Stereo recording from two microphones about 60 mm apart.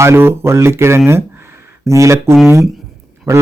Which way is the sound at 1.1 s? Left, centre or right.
Right.